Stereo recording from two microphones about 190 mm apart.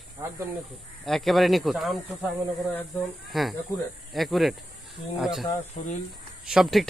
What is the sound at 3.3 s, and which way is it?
Speech, centre (ahead or behind).